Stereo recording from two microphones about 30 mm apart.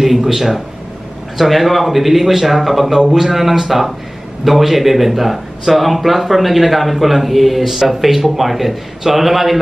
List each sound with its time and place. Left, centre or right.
0.0 s a man's voice: centre